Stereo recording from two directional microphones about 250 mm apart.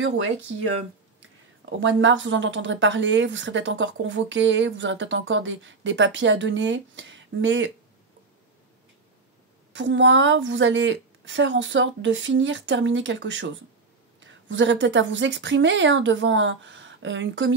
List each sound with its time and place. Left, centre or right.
1.7 s speech: right
9.7 s speech: right